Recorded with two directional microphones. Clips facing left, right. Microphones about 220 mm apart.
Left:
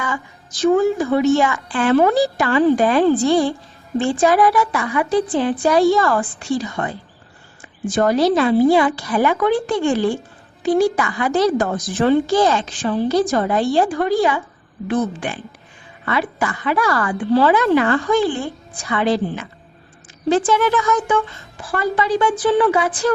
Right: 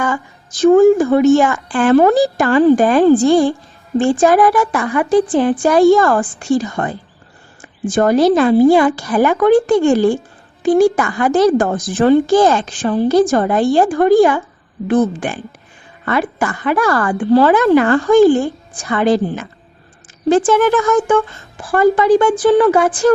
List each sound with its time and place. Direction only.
0.6 s a woman's voice: 50° right (ahead or behind)